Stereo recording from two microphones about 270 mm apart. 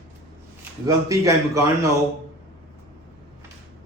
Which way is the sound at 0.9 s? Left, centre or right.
Centre.